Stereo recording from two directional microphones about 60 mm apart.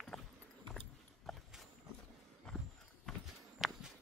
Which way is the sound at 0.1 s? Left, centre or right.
Centre.